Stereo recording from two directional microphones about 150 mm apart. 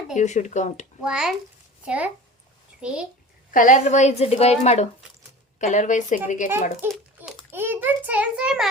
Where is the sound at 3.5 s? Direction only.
60° left (ahead or behind).